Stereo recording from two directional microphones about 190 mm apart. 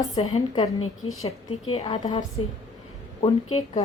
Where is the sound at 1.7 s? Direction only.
30° left (ahead or behind).